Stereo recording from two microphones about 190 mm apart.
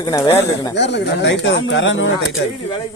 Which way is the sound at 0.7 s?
65° left (ahead or behind).